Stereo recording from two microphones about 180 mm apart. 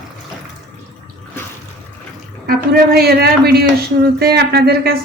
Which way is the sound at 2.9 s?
60° right (ahead or behind).